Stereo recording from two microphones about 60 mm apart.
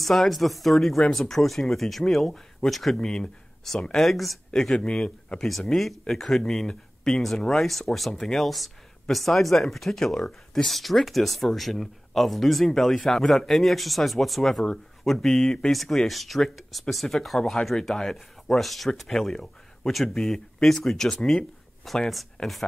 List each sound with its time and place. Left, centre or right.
0.0 s speech: centre
4.5 s speech: centre